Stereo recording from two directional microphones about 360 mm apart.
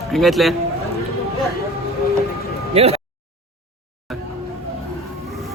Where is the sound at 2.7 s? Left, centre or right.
Centre.